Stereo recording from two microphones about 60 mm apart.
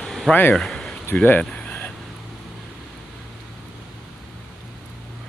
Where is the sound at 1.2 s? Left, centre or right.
Left.